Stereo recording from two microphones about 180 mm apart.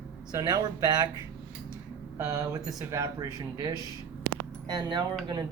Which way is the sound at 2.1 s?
20° right (ahead or behind).